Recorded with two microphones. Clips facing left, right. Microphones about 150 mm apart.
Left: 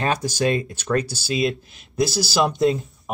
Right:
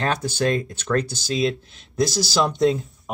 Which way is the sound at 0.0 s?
10° left (ahead or behind).